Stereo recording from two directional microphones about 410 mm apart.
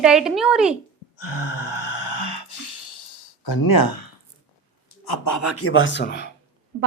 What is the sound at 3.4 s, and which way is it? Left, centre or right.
Speech, left.